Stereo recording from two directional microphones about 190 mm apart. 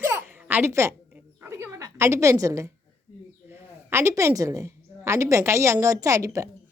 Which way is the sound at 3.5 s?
10° right (ahead or behind).